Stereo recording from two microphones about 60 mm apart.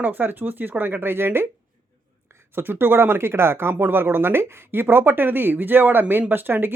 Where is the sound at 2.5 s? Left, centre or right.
Right.